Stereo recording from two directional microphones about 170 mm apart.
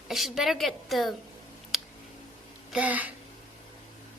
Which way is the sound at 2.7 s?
10° right (ahead or behind).